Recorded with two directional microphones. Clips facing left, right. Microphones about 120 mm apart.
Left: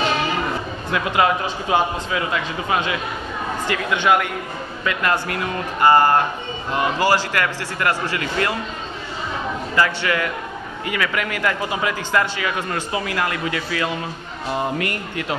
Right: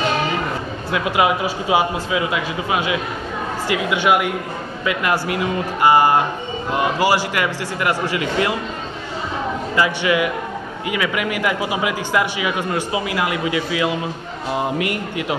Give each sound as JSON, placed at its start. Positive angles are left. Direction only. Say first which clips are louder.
{"t": 0.9, "sound": "a man's voice", "louder": "right 1 dB", "side_deg": -10}
{"t": 9.8, "sound": "a man's voice", "louder": "right 2 dB", "side_deg": -15}